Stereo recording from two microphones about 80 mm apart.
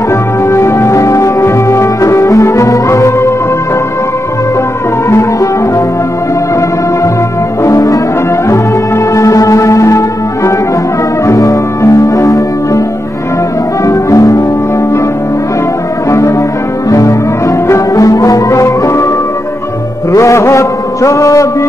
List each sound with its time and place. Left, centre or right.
0.5 s music: left
7.6 s brass instrument: left
8.5 s music: left
13.8 s music: left
16.1 s music: left
20.1 s a sound: left